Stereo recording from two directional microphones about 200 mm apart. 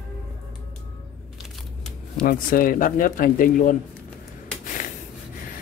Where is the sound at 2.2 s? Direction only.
45° left (ahead or behind).